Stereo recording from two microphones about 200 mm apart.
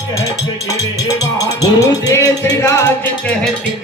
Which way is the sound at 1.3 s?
20° left (ahead or behind).